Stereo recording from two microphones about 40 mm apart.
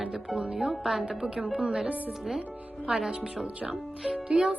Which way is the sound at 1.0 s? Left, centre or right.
Right.